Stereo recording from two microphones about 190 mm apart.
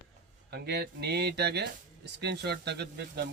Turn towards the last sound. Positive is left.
turn(degrees=-60)  # may be behind; listen again after turning